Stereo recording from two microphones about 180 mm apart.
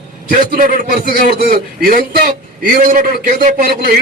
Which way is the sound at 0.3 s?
50° right (ahead or behind).